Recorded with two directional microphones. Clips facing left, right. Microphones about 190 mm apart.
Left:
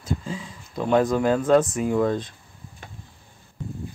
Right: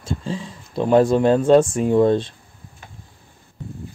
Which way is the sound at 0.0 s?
30° right (ahead or behind).